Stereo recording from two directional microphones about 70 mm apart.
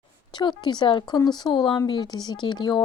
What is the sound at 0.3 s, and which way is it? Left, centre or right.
Speech, left.